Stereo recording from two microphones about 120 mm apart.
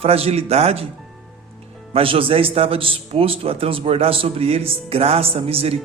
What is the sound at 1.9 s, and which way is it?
A man's voice, 50° right (ahead or behind).